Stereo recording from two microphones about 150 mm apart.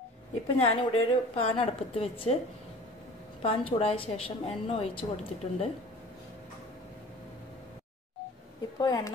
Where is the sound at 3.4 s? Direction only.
40° left (ahead or behind).